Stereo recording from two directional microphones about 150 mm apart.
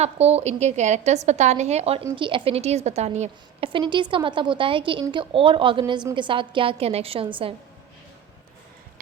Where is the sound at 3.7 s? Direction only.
30° right (ahead or behind).